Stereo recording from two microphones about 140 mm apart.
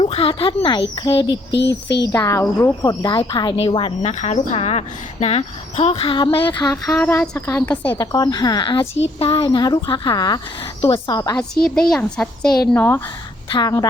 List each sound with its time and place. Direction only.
0.0 s speech: 40° left (ahead or behind)
4.0 s a woman's voice: 55° left (ahead or behind); by 6.7 s 35° left (ahead or behind)
6.8 s speech: 5° left (ahead or behind)
7.1 s a woman's voice: 15° left (ahead or behind)
7.9 s speech: 30° left (ahead or behind)
9.1 s speech: 40° left (ahead or behind)
11.6 s a woman's voice: 5° left (ahead or behind)
13.5 s speech: 30° left (ahead or behind)